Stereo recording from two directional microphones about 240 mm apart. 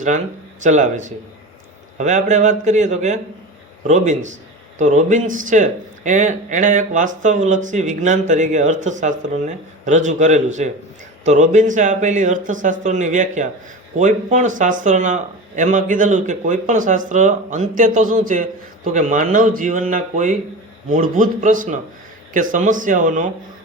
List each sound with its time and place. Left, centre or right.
0.6 s a man's voice: right